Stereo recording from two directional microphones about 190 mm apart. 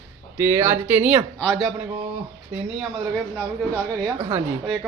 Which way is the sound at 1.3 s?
5° left (ahead or behind).